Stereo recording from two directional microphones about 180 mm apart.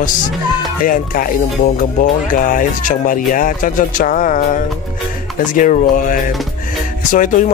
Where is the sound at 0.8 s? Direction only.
50° left (ahead or behind).